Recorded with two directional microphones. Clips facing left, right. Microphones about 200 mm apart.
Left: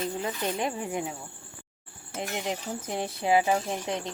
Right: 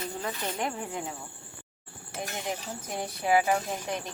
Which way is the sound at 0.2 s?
15° left (ahead or behind).